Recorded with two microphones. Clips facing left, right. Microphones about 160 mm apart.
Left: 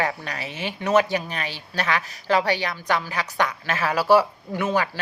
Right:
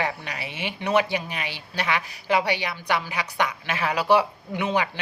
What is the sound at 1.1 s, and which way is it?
A woman's voice, 10° right (ahead or behind).